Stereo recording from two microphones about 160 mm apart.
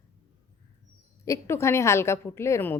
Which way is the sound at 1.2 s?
15° left (ahead or behind).